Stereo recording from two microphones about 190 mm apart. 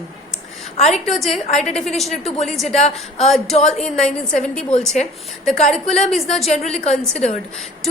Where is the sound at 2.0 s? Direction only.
35° left (ahead or behind).